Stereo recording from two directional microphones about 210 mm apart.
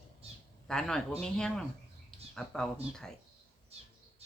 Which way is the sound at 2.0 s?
Centre (ahead or behind).